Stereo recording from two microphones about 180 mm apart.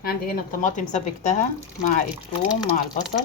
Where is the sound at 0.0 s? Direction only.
55° left (ahead or behind).